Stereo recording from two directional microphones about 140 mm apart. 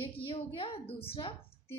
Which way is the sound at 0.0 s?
40° left (ahead or behind).